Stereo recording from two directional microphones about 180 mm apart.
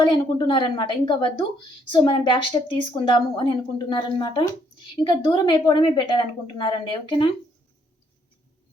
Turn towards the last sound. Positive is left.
turn(degrees=30)  # may be behind; listen again after turning